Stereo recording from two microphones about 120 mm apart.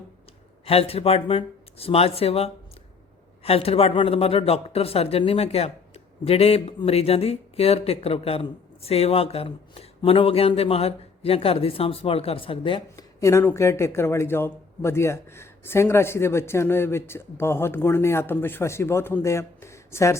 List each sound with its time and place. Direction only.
0.6 s speech: 55° left (ahead or behind)
13.0 s speech: 25° left (ahead or behind)